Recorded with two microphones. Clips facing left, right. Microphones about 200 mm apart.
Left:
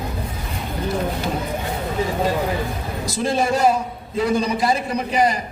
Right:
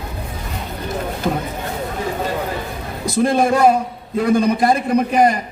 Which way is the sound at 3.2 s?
55° right (ahead or behind).